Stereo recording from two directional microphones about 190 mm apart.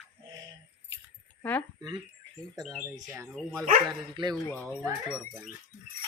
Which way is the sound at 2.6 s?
Centre (ahead or behind).